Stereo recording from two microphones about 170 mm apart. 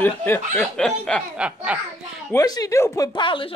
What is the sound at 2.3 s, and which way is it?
Speech, 20° left (ahead or behind).